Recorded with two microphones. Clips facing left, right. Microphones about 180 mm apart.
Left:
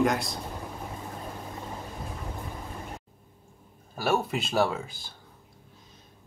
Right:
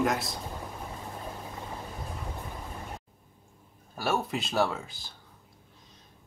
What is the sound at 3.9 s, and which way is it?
Speech, centre (ahead or behind).